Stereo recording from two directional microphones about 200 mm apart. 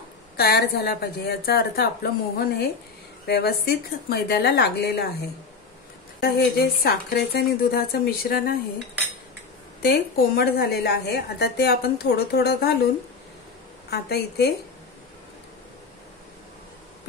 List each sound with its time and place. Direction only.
0.4 s a woman's voice: 55° left (ahead or behind)
6.2 s a woman's voice: 50° left (ahead or behind)
9.8 s a woman's voice: 50° left (ahead or behind)
13.8 s a woman's voice: 55° left (ahead or behind)